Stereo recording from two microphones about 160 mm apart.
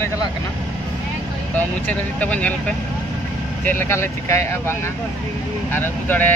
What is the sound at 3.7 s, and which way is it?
Speech, 15° left (ahead or behind).